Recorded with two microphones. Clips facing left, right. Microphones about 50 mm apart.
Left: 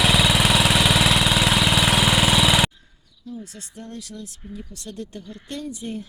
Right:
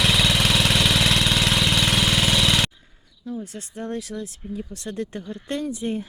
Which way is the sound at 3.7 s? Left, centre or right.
Right.